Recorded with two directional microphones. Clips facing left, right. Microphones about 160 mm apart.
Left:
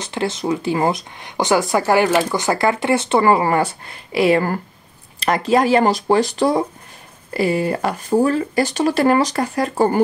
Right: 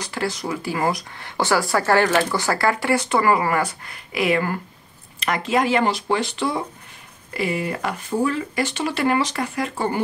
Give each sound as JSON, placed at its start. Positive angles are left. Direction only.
{"t": 0.0, "sound": "speech", "side_deg": 25}